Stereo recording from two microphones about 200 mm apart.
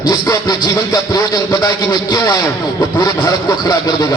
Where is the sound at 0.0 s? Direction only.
20° left (ahead or behind).